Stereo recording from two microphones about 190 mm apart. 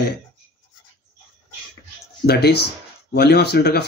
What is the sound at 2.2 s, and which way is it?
A man's voice, 60° left (ahead or behind).